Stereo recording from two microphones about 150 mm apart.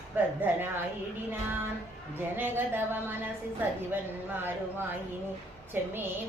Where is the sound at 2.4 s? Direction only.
15° right (ahead or behind).